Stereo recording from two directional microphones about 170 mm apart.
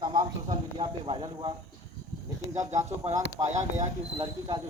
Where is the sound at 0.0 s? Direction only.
25° right (ahead or behind).